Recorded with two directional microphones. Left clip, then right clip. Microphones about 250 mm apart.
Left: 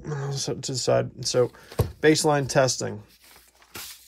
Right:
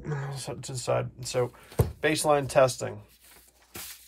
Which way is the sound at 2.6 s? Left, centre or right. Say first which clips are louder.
Even; left.